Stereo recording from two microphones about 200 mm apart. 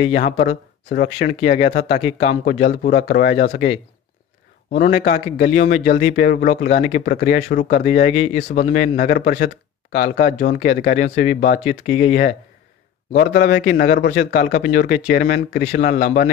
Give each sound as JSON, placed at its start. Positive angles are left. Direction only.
{"t": 0.0, "sound": "a man's voice", "side_deg": 35}
{"t": 4.7, "sound": "a man's voice", "side_deg": 40}
{"t": 8.4, "sound": "a man's voice", "side_deg": 55}